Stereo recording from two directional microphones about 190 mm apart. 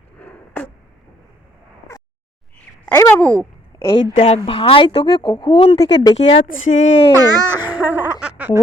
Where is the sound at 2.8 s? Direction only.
10° left (ahead or behind).